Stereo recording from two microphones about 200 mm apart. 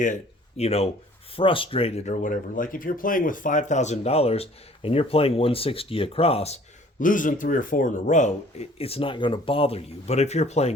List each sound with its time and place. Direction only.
0.0 s speech: 35° left (ahead or behind)
7.0 s speech: 40° left (ahead or behind)